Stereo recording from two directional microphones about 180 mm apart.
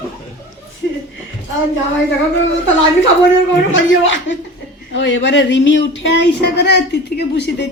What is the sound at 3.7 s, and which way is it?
Speech, 90° left.